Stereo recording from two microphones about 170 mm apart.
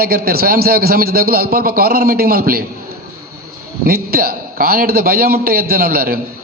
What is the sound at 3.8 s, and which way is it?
A man's voice, 65° right (ahead or behind).